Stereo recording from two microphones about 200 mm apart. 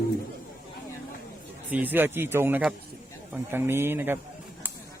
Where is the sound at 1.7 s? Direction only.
10° right (ahead or behind).